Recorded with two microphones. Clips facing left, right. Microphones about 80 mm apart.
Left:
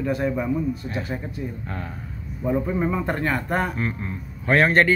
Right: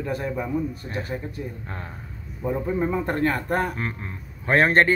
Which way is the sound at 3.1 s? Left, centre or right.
Right.